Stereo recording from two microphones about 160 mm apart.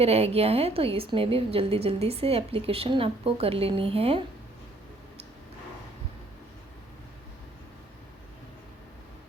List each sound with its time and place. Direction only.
0.0 s a woman's voice: 40° right (ahead or behind)